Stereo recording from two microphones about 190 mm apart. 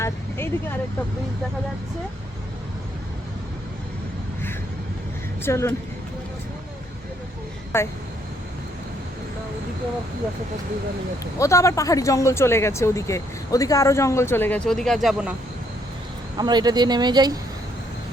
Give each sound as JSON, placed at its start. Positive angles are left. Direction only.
{"t": 0.0, "sound": "vehicle", "side_deg": 10}
{"t": 5.4, "sound": "speech", "side_deg": 15}
{"t": 7.7, "sound": "speech", "side_deg": 15}
{"t": 11.3, "sound": "speech", "side_deg": 15}
{"t": 16.4, "sound": "speech", "side_deg": -20}